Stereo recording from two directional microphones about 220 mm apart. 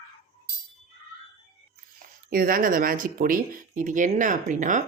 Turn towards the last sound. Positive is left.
turn(degrees=-35)  # may be behind; listen again after turning